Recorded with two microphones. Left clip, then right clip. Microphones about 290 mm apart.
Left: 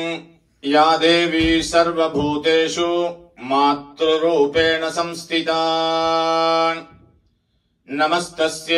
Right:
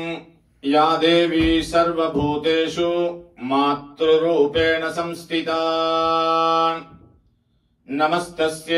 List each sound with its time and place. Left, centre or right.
0.0 s mantra: left
7.9 s mantra: left